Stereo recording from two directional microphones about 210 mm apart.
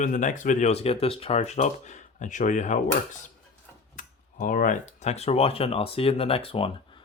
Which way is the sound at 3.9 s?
40° left (ahead or behind).